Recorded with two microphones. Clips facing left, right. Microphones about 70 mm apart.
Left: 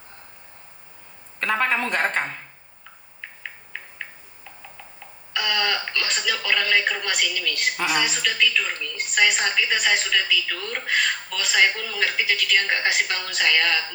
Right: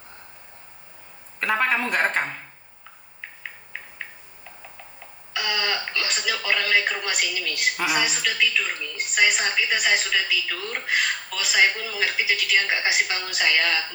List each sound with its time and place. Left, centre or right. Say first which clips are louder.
1.4 s a woman's voice: even; centre
5.3 s a woman's voice: left 2 dB; centre